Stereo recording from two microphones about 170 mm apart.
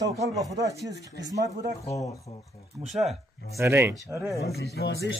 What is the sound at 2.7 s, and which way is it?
Speech, centre (ahead or behind).